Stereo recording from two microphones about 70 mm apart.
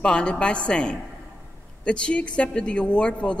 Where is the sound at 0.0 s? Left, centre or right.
Centre.